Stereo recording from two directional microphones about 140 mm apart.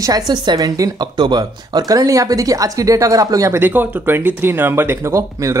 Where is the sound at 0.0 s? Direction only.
30° right (ahead or behind).